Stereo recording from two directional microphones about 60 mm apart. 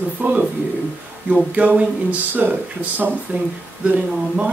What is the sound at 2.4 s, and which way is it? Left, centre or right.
Speech, right.